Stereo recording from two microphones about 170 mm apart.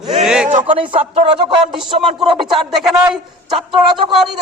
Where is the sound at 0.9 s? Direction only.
30° right (ahead or behind).